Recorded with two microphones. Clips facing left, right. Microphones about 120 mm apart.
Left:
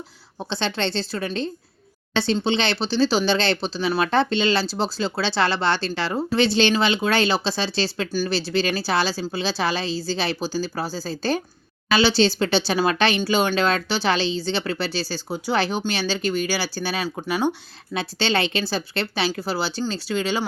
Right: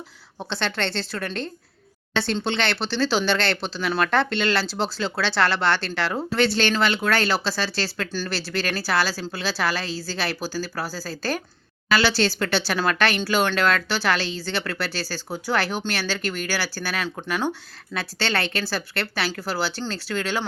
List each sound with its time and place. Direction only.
0.5 s speech: 15° left (ahead or behind)